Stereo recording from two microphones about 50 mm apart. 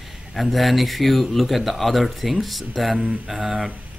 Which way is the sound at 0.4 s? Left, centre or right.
Centre.